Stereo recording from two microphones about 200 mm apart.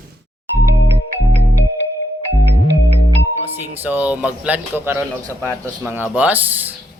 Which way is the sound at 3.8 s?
5° right (ahead or behind).